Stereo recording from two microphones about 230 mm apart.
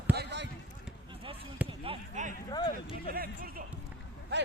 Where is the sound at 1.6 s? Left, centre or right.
Right.